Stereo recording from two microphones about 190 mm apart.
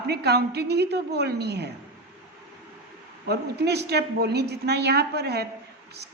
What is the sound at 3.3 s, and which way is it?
A woman's voice, 60° right (ahead or behind).